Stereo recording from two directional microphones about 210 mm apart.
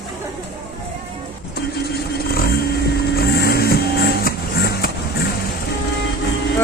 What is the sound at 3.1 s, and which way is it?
Music, 50° left (ahead or behind).